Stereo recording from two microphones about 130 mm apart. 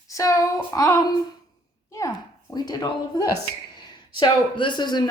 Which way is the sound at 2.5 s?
30° left (ahead or behind).